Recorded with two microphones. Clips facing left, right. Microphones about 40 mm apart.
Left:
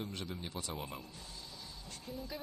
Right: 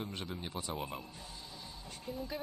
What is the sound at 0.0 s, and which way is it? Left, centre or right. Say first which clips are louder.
A woman's voice: right 1 dB; centre.